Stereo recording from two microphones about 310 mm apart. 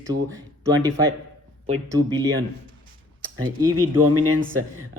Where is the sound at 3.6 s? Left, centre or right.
Centre.